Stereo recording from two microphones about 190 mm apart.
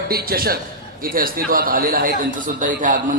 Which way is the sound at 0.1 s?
50° right (ahead or behind).